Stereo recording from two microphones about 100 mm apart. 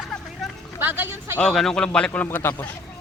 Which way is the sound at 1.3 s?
5° left (ahead or behind).